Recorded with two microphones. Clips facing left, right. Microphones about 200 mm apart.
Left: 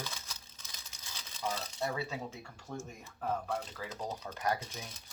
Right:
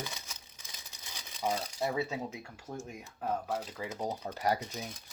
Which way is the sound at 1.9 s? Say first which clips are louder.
Right 4 dB; 20° right (ahead or behind).